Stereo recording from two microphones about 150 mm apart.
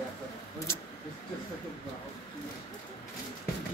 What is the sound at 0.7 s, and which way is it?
Speech, 20° left (ahead or behind).